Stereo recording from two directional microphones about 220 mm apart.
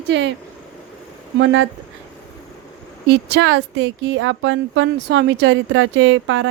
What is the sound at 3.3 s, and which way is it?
Speech, 55° right (ahead or behind).